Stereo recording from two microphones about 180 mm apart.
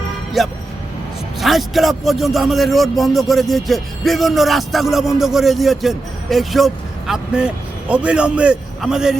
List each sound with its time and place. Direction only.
0.4 s a man's voice: centre (ahead or behind)